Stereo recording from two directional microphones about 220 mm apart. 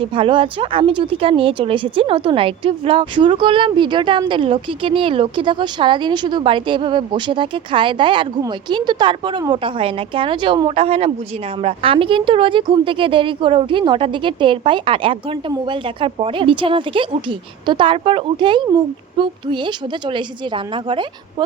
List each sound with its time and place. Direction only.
0.0 s speech: 25° right (ahead or behind)